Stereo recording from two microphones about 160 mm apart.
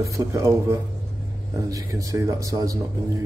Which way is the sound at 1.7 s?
20° right (ahead or behind).